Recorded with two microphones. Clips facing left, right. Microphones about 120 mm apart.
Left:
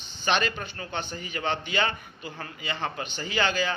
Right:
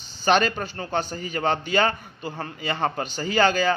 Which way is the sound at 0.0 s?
40° right (ahead or behind).